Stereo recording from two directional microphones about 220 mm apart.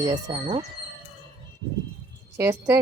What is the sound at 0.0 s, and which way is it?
Speech, 20° right (ahead or behind).